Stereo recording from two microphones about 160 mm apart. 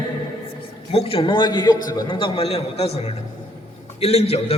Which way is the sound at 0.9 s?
35° left (ahead or behind).